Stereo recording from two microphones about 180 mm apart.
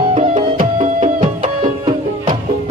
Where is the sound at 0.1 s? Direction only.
35° right (ahead or behind).